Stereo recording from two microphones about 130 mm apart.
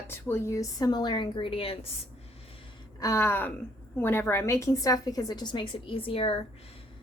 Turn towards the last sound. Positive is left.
turn(degrees=45)  # may be behind; listen again after turning